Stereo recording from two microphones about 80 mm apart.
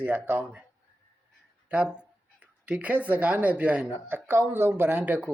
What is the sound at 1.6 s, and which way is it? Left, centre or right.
Speech, centre.